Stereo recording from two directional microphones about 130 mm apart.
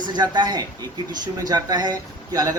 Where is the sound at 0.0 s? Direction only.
35° right (ahead or behind).